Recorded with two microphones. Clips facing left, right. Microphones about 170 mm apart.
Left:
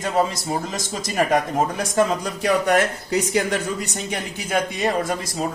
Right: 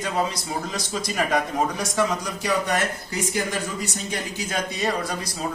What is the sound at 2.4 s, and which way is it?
Speech, 60° left (ahead or behind).